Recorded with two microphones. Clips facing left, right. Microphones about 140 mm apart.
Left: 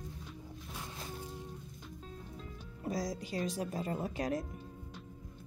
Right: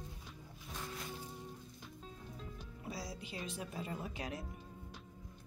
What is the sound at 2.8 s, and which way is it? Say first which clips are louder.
Speech: left 9 dB; 40° left (ahead or behind).